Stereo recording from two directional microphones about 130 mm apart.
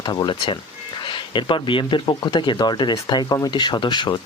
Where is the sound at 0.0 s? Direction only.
35° left (ahead or behind).